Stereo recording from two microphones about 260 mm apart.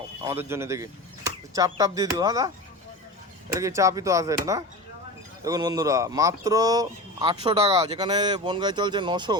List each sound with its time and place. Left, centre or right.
0.3 s speech: centre
3.6 s speech: centre